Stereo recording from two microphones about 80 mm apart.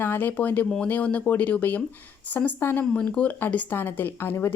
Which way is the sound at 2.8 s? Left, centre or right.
Centre.